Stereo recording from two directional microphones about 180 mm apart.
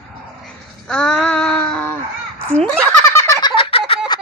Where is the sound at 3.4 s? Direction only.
30° left (ahead or behind).